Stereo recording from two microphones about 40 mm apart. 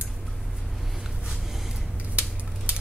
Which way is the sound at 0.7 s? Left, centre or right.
Centre.